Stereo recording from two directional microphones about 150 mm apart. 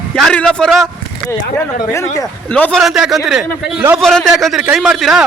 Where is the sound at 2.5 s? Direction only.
10° left (ahead or behind).